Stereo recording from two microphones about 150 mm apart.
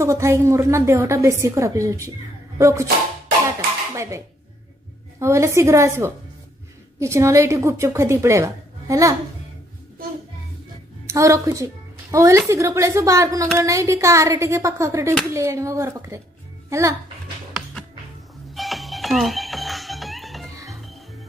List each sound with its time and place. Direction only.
0.0 s a woman's voice: 20° right (ahead or behind)
3.9 s a sound: 20° right (ahead or behind)
5.2 s a woman's voice: 20° right (ahead or behind)
11.1 s a woman's voice: 20° right (ahead or behind)
18.5 s music: centre (ahead or behind)